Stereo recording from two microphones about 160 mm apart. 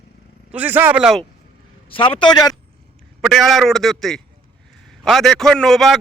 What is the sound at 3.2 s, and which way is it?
A man's voice, centre (ahead or behind).